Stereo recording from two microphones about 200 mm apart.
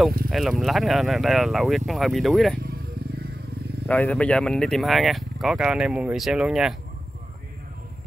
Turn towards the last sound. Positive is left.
turn(degrees=-5)  # may be behind; listen again after turning